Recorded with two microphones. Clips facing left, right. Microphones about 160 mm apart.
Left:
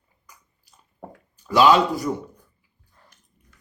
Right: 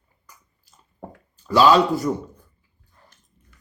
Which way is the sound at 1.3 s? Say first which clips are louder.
Right 1 dB; 15° left (ahead or behind).